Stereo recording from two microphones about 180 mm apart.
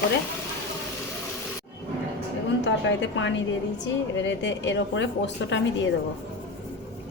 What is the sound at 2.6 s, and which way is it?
A woman's voice, 85° left.